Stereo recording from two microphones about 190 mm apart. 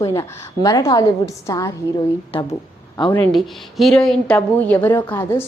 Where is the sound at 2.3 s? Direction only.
30° left (ahead or behind).